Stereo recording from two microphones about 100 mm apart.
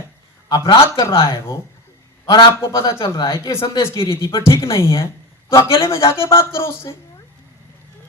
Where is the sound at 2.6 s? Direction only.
30° left (ahead or behind).